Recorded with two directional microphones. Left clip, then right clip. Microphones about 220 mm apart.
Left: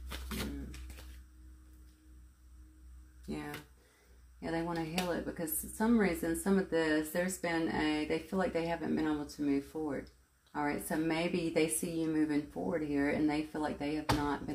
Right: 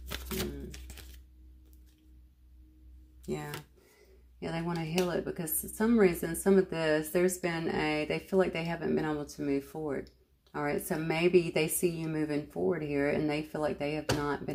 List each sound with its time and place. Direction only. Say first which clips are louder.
0.1 s shuffling cards: right 5 dB; 50° right (ahead or behind)
3.3 s a sound: right 4 dB; 40° right (ahead or behind)
4.4 s a woman's voice: even; 40° right (ahead or behind)